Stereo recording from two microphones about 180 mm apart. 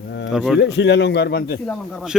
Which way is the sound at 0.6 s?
70° left (ahead or behind).